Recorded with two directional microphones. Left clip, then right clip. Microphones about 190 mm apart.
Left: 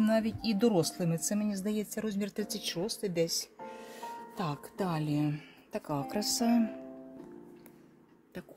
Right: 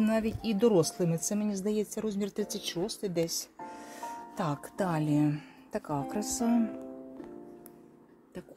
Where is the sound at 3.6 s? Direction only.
30° right (ahead or behind).